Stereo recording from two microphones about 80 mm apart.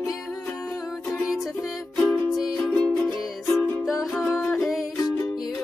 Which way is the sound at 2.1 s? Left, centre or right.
Centre.